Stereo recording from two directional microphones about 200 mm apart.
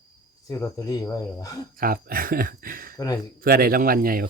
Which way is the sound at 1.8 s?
45° right (ahead or behind).